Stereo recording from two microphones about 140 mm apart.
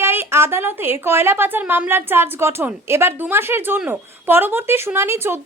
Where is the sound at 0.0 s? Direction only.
15° right (ahead or behind).